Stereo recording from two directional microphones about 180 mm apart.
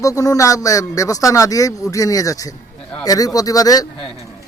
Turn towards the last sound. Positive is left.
turn(degrees=20)  # may be behind; listen again after turning